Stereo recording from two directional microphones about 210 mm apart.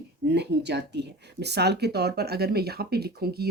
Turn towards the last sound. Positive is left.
turn(degrees=-50)  # may be behind; listen again after turning